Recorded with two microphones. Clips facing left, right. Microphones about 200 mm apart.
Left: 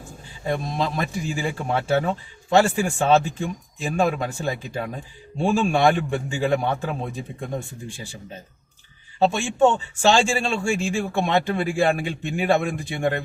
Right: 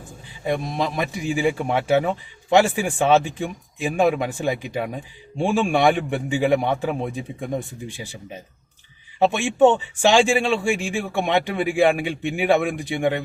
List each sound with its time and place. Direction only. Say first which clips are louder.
0.4 s a man's voice: right 1 dB; 15° right (ahead or behind)
9.1 s a man's voice: right 2 dB; 15° right (ahead or behind)